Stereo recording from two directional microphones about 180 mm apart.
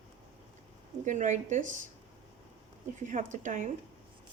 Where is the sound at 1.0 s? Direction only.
45° right (ahead or behind).